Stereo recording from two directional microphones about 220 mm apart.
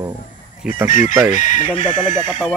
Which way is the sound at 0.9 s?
35° left (ahead or behind).